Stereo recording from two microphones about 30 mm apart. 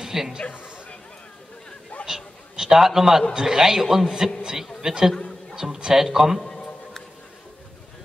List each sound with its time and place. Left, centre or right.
0.0 s music: centre
2.0 s a sound: centre
3.3 s a man's voice: centre
6.0 s a man's voice: centre
6.4 s music: left